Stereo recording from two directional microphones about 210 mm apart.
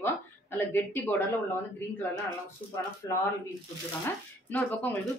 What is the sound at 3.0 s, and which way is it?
Speech, 15° left (ahead or behind).